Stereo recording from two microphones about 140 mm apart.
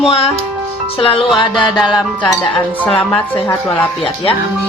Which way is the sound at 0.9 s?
40° left (ahead or behind).